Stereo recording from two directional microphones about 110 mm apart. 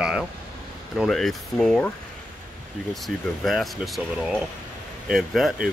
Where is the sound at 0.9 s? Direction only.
Centre (ahead or behind).